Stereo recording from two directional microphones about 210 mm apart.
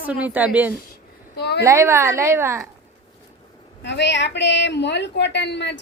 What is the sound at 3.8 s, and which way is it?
A woman's voice, 55° left (ahead or behind).